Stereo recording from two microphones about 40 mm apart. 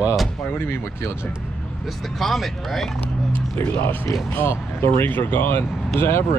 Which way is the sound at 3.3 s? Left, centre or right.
Left.